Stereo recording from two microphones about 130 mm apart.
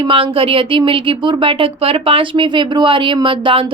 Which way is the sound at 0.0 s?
45° right (ahead or behind).